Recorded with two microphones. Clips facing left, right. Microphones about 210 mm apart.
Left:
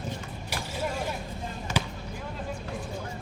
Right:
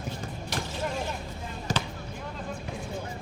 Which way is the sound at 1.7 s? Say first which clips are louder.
Even; 35° right (ahead or behind).